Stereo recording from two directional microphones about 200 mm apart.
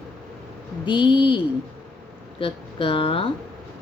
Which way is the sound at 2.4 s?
25° left (ahead or behind).